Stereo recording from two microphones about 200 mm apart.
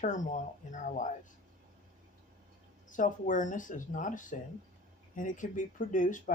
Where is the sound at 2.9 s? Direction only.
40° left (ahead or behind).